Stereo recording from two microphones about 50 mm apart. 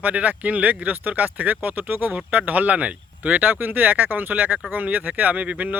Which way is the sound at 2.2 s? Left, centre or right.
Right.